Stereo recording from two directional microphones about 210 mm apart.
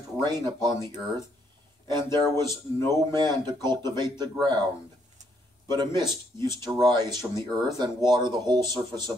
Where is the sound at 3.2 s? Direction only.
20° right (ahead or behind).